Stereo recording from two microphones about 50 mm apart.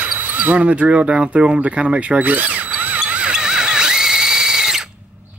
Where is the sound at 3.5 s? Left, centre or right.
Centre.